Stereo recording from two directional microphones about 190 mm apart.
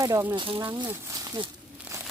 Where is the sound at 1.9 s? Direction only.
5° right (ahead or behind).